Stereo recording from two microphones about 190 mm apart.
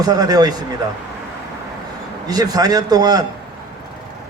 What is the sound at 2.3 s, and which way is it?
Speech, 20° right (ahead or behind).